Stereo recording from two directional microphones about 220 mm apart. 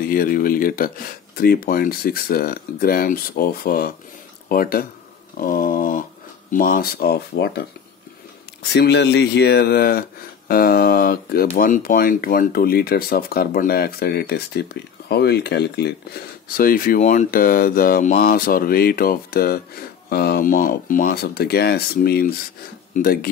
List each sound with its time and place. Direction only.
0.1 s speech: 40° left (ahead or behind)
8.7 s speech: 50° left (ahead or behind)